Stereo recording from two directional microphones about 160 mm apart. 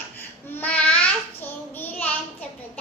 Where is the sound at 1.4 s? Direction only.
10° left (ahead or behind).